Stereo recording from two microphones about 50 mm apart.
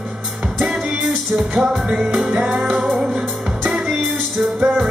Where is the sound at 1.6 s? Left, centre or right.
Centre.